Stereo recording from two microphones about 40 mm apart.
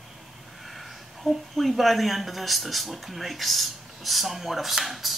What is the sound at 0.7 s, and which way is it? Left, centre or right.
A woman's voice, centre.